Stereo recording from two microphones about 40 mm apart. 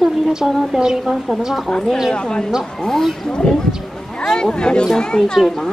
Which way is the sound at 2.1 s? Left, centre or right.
Left.